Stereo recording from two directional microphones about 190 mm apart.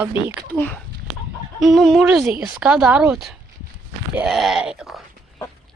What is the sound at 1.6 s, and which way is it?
A woman's voice, centre (ahead or behind).